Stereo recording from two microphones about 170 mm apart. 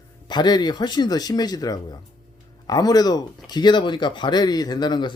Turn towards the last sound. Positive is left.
turn(degrees=25)  # may be behind; listen again after turning